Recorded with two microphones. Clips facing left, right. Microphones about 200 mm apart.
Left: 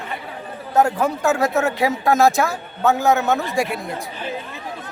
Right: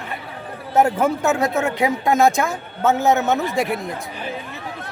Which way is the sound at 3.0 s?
20° right (ahead or behind).